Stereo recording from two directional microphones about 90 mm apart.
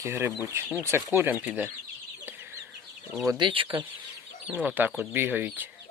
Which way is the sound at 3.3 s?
70° right (ahead or behind).